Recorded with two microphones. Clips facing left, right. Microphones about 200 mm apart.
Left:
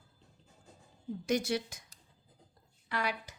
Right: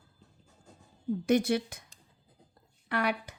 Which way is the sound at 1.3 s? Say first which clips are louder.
Right 5 dB; 55° right (ahead or behind).